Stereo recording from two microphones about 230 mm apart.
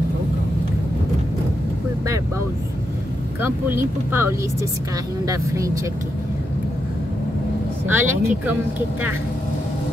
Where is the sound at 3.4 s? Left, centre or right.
Centre.